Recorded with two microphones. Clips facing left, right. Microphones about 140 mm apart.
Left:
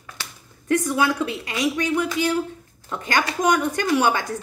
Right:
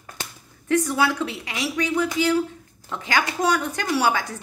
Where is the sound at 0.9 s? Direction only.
15° left (ahead or behind).